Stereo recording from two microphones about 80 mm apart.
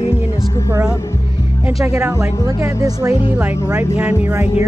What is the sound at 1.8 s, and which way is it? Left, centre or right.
Music, right.